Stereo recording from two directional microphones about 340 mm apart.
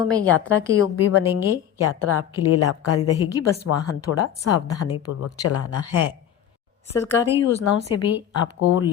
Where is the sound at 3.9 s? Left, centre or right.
Left.